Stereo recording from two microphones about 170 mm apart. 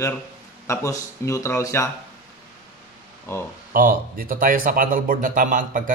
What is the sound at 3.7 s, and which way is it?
Speech, 55° right (ahead or behind).